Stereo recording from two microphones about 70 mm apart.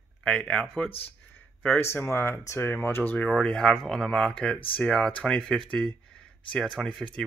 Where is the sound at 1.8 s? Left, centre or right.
Left.